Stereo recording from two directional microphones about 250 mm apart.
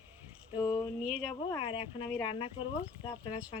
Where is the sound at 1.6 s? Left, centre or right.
Left.